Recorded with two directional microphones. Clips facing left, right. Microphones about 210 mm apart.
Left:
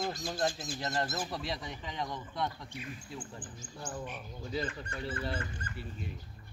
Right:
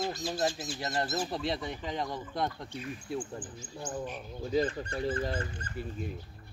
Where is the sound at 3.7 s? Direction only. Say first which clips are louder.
Right 4 dB; 20° right (ahead or behind).